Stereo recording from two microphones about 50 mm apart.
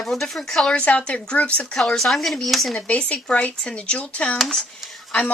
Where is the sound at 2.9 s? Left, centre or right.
Left.